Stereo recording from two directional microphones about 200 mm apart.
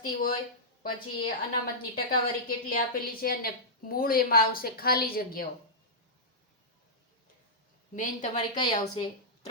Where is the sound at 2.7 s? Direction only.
45° left (ahead or behind).